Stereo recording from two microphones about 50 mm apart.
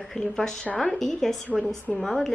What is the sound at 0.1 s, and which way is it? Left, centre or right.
A woman's voice, centre.